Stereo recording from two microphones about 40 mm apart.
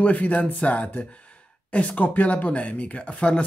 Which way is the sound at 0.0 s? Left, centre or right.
Left.